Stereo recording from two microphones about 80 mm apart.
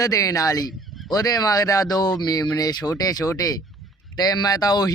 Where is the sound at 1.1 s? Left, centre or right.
Left.